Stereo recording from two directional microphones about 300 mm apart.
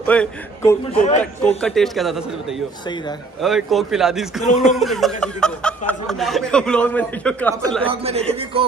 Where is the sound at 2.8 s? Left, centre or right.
Centre.